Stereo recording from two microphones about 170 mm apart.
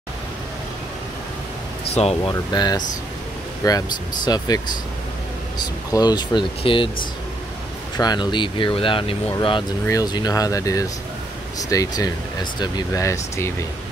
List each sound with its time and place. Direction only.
2.0 s speech: 40° left (ahead or behind)
2.5 s speech: 25° left (ahead or behind)
5.6 s speech: 25° left (ahead or behind)
8.0 s speech: 25° left (ahead or behind)